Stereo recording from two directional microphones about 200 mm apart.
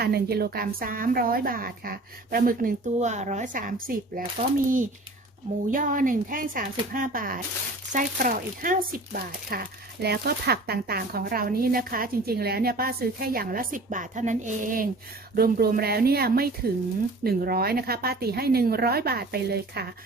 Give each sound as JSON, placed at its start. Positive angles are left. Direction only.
{"t": 0.0, "sound": "speech", "side_deg": -50}